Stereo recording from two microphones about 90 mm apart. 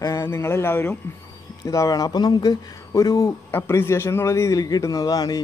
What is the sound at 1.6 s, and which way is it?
A man's voice, 40° left (ahead or behind).